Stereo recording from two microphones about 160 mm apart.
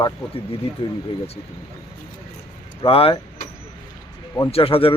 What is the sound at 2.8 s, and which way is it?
Speech, 35° left (ahead or behind).